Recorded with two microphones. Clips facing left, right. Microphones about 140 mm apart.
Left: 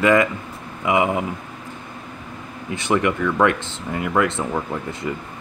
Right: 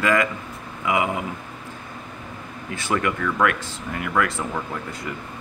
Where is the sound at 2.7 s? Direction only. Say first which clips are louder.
Left 4 dB; 20° left (ahead or behind).